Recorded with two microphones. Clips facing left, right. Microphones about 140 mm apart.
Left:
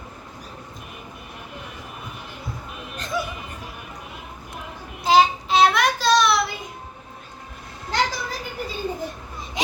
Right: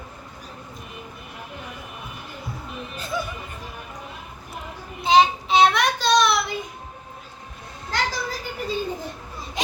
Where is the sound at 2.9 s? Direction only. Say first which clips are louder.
Left 2 dB; 5° right (ahead or behind).